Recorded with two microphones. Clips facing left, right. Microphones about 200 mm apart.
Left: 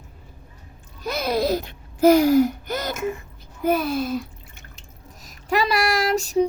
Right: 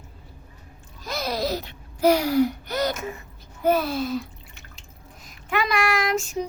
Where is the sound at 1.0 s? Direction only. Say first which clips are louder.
Left 5 dB; 55° left (ahead or behind).